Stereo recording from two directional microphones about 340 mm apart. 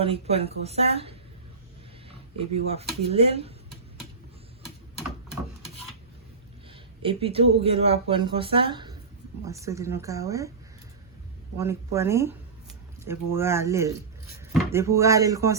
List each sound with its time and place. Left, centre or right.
0.0 s speech: centre
2.6 s speech: centre
7.0 s speech: centre
11.5 s speech: centre